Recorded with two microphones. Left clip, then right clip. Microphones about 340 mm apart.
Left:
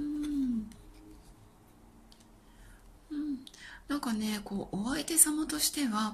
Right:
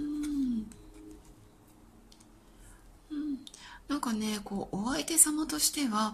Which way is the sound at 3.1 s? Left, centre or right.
Centre.